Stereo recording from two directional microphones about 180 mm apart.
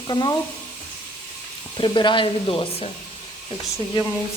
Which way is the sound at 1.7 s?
25° left (ahead or behind).